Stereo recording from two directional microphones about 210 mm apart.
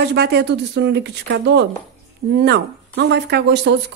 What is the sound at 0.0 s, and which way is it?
Speech, 50° right (ahead or behind).